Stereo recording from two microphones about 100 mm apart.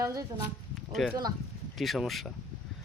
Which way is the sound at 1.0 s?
Centre (ahead or behind).